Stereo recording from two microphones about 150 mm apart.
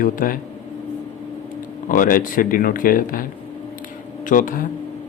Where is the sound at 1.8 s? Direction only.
65° left (ahead or behind).